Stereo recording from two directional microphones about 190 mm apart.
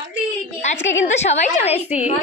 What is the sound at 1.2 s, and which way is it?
Speech, 35° left (ahead or behind).